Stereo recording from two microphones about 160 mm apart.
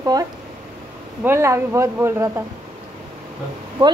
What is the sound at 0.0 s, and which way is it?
Speech, 20° right (ahead or behind).